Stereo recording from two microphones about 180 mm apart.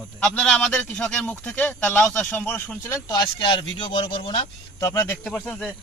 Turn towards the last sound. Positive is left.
turn(degrees=10)  # may be behind; listen again after turning